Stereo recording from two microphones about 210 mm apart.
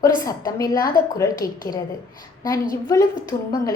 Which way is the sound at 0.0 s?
15° left (ahead or behind).